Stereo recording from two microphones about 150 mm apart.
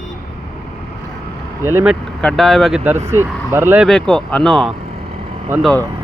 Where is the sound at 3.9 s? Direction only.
5° left (ahead or behind).